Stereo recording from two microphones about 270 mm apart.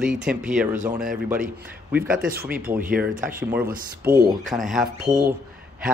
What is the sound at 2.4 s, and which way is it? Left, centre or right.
Speech, right.